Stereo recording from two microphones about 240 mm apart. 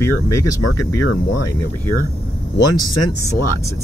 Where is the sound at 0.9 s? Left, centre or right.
Left.